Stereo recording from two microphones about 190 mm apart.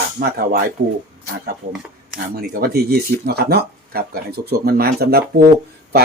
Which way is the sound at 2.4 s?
55° right (ahead or behind).